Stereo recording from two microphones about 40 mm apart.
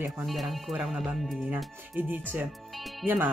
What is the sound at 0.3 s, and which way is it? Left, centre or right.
Speech, centre.